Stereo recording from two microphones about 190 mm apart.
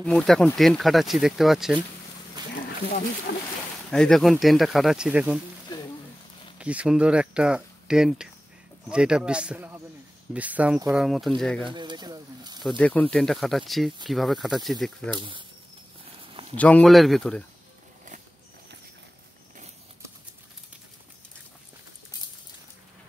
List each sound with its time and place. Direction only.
0.0 s speech: centre (ahead or behind)
3.3 s speech: 60° left (ahead or behind)
3.9 s speech: 5° left (ahead or behind)
6.6 s speech: 5° right (ahead or behind)
11.7 s speech: 25° right (ahead or behind)
12.6 s speech: 5° left (ahead or behind)
15.1 s speech: 25° right (ahead or behind)
16.5 s speech: 5° left (ahead or behind)